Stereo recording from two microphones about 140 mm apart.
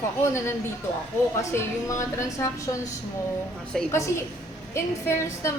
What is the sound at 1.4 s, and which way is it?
A woman's voice, 20° left (ahead or behind).